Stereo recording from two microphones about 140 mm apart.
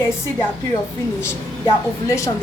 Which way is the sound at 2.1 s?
20° left (ahead or behind).